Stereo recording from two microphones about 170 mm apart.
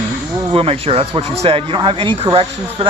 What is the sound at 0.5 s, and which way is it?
Speech, 35° right (ahead or behind).